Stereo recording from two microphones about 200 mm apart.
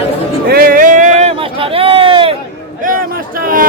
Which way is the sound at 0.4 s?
45° right (ahead or behind).